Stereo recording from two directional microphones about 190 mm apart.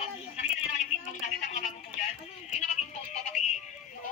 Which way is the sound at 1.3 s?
40° left (ahead or behind).